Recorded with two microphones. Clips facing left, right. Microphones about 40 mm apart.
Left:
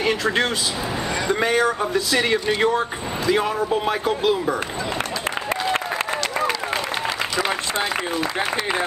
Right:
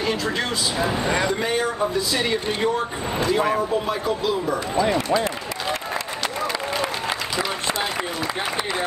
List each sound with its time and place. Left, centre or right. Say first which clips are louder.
0.0 s speech: left 3 dB; left
2.1 s speech: left 3 dB; left
4.0 s speech: left 3 dB; left